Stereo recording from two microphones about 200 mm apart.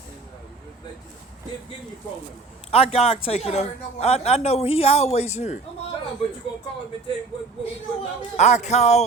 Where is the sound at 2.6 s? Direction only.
30° left (ahead or behind).